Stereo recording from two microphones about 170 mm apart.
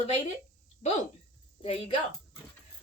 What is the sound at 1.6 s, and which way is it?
Speech, 35° left (ahead or behind).